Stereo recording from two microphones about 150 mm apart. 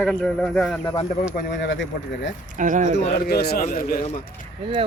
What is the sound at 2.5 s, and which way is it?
Speech, 60° right (ahead or behind).